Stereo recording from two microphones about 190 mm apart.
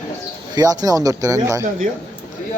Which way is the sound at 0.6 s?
20° right (ahead or behind).